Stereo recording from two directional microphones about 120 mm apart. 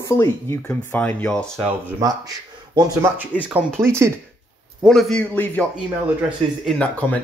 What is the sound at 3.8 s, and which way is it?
Speech, 20° right (ahead or behind).